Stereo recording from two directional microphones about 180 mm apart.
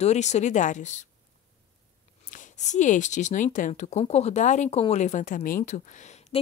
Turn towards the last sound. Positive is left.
turn(degrees=40)  # may be behind; listen again after turning